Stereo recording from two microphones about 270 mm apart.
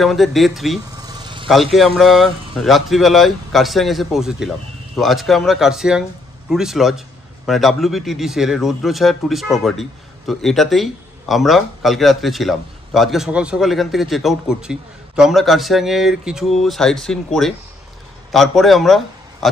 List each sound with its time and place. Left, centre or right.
0.0 s a man's voice: centre
0.9 s vehicle: centre
1.5 s a man's voice: centre